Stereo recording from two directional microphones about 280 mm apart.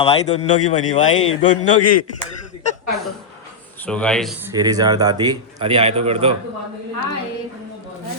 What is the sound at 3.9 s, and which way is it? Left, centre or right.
Speech, centre.